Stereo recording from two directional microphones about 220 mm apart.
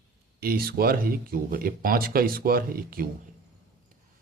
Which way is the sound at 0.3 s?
45° right (ahead or behind).